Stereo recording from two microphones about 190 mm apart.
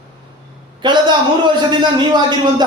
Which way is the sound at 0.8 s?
25° right (ahead or behind).